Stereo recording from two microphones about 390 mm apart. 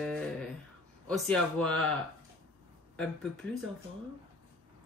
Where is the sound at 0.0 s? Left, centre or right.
Centre.